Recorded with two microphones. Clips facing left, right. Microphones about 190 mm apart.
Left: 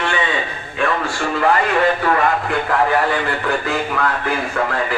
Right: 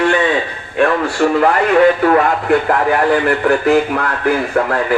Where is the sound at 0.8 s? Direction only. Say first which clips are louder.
Right 7 dB; 55° right (ahead or behind).